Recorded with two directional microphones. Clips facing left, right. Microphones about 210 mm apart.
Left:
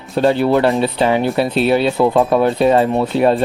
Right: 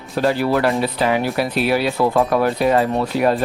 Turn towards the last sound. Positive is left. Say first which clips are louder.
# left 4 dB
turn(degrees=25)  # may be behind; listen again after turning